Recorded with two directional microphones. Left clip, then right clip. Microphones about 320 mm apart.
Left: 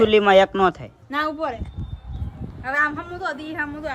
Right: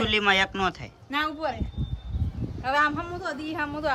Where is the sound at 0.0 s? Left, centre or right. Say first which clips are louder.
Left 8 dB; centre.